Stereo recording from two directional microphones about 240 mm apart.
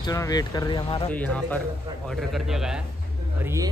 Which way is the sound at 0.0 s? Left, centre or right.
Centre.